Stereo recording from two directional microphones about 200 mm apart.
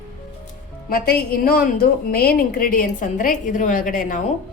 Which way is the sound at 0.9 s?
50° left (ahead or behind).